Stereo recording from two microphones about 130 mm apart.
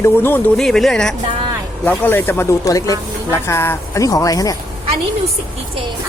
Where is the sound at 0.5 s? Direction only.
Centre (ahead or behind).